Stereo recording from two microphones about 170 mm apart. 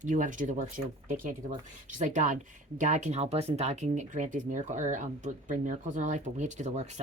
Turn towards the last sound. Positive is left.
turn(degrees=-40)  # may be behind; listen again after turning